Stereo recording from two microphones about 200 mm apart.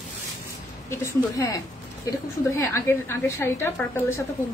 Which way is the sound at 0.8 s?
15° left (ahead or behind).